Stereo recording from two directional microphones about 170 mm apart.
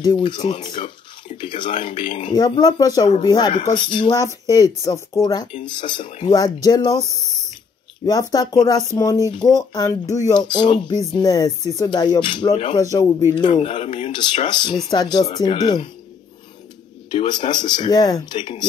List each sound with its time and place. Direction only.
0.0 s speech: 25° left (ahead or behind)
0.6 s speech: 45° left (ahead or behind)
1.4 s speech: 30° left (ahead or behind)
8.0 s speech: 25° left (ahead or behind)
12.7 s speech: 20° left (ahead or behind)
13.5 s speech: 35° left (ahead or behind)
14.1 s speech: 25° left (ahead or behind)
17.1 s speech: 25° left (ahead or behind)